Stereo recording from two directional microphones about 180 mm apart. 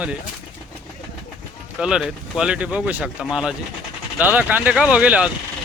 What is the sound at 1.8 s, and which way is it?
Speech, 5° right (ahead or behind).